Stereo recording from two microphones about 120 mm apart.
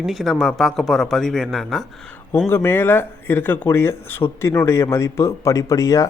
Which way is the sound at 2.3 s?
20° left (ahead or behind).